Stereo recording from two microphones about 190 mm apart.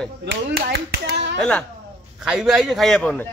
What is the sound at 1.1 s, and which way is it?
Clapping, 65° right (ahead or behind).